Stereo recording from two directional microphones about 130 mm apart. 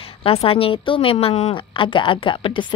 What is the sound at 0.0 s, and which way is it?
A woman's voice, 45° left (ahead or behind).